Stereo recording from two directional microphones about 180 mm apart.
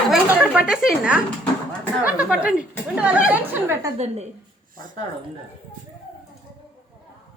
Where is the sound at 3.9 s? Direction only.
35° right (ahead or behind).